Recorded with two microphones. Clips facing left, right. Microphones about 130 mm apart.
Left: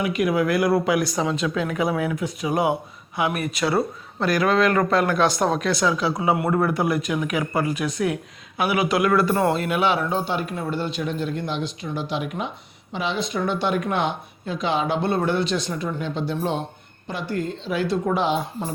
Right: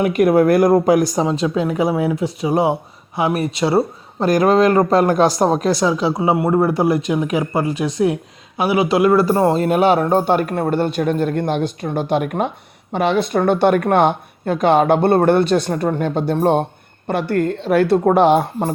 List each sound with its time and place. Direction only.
0.0 s speech: 50° right (ahead or behind)